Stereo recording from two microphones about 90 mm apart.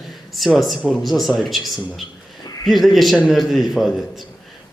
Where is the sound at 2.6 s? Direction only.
Centre (ahead or behind).